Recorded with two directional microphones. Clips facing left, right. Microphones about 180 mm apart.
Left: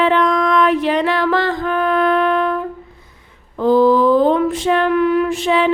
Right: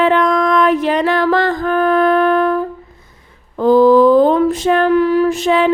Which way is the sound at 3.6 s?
45° right (ahead or behind).